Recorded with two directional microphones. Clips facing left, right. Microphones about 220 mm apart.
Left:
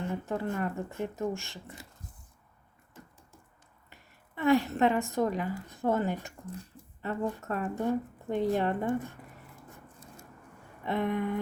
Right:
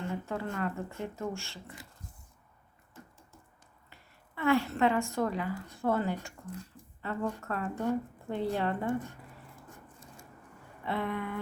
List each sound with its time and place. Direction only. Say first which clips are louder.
0.0 s speech: left 2 dB; 15° left (ahead or behind)
4.4 s speech: left 2 dB; 15° left (ahead or behind)
10.8 s speech: left 4 dB; 15° left (ahead or behind)